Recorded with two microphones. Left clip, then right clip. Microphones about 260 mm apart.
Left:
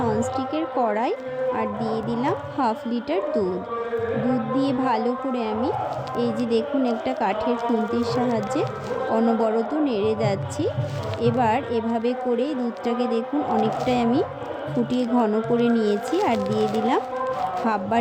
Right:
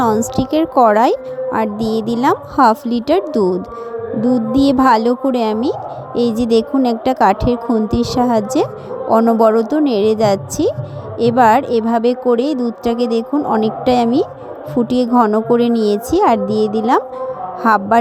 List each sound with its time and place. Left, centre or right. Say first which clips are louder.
0.3 s a woman's voice: right 11 dB; right